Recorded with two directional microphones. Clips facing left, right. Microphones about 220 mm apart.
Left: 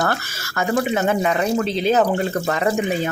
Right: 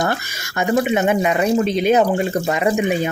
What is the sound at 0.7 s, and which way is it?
Speech, 20° right (ahead or behind).